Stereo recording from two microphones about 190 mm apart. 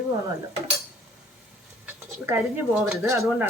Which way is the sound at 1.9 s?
10° right (ahead or behind).